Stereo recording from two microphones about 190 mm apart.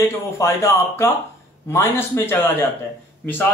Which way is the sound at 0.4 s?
15° left (ahead or behind).